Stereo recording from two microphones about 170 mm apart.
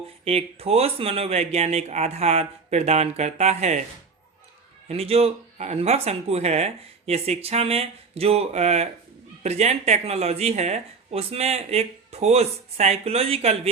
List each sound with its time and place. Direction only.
0.3 s speech: 35° right (ahead or behind)
4.9 s speech: 35° right (ahead or behind)